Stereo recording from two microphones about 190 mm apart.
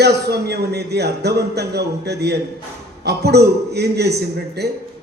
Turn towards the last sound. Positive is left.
turn(degrees=-60)  # may be behind; listen again after turning